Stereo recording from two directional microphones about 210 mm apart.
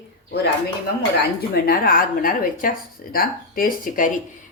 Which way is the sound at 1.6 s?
45° left (ahead or behind).